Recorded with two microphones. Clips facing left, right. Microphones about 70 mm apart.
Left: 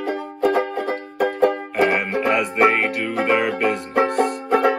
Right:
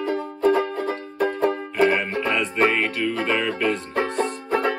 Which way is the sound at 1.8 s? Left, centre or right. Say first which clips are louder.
Left 1 dB; left.